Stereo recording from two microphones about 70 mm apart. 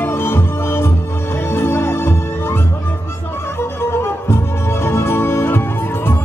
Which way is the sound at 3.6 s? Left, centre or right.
Left.